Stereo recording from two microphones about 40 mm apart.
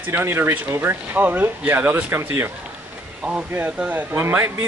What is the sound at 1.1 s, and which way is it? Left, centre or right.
Speech, right.